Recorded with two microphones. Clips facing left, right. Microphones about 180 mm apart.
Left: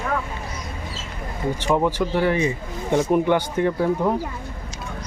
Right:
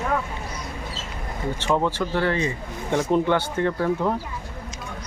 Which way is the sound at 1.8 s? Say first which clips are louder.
Left 3 dB; 10° left (ahead or behind).